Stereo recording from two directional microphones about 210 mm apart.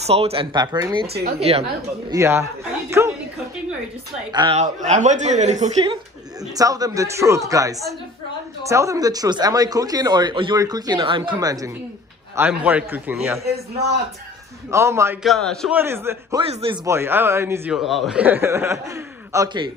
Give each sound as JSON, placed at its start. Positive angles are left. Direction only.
{"t": 0.0, "sound": "speech", "side_deg": -30}
{"t": 1.0, "sound": "a man's voice", "side_deg": -50}
{"t": 2.0, "sound": "speech", "side_deg": -15}
{"t": 4.3, "sound": "speech", "side_deg": -20}
{"t": 4.6, "sound": "speech", "side_deg": -35}
{"t": 6.5, "sound": "speech", "side_deg": -15}
{"t": 13.4, "sound": "a man's voice", "side_deg": -50}
{"t": 14.7, "sound": "speech", "side_deg": -15}
{"t": 15.2, "sound": "a man's voice", "side_deg": 0}
{"t": 15.7, "sound": "speech", "side_deg": -10}
{"t": 16.4, "sound": "speech", "side_deg": -25}
{"t": 16.8, "sound": "speech", "side_deg": -10}
{"t": 17.7, "sound": "speech", "side_deg": 0}